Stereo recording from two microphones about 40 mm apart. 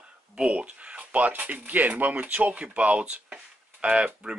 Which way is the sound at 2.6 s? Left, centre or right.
Right.